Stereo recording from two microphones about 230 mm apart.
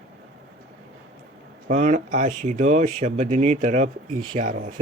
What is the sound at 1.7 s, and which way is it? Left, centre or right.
Speech, right.